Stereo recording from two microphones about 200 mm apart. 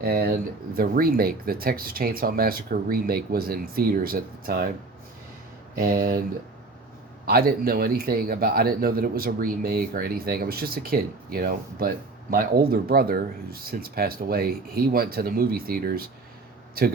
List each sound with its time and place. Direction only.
0.0 s a sound: 50° right (ahead or behind)
0.8 s speech: 45° right (ahead or behind)
5.7 s speech: 45° right (ahead or behind)
7.3 s speech: 50° right (ahead or behind)